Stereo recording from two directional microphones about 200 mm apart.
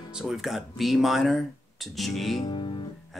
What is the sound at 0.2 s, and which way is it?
Speech, centre (ahead or behind).